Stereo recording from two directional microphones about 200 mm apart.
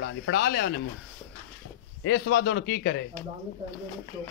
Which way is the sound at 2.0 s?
60° left (ahead or behind).